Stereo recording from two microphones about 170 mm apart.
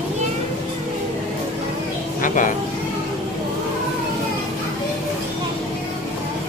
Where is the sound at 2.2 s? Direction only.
50° left (ahead or behind).